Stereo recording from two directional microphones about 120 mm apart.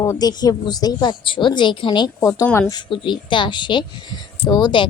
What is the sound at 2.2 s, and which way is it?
Speech, 25° left (ahead or behind).